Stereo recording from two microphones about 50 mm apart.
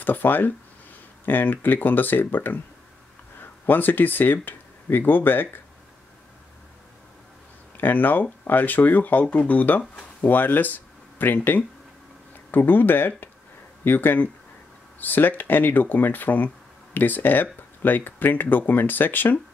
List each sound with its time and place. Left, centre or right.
0.0 s speech: left
3.6 s speech: left
7.7 s speech: left